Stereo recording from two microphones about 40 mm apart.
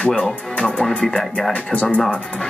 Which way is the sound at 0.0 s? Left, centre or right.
Left.